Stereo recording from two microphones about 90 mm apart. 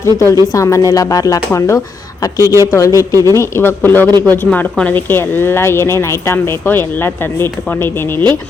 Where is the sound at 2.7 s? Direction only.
35° left (ahead or behind).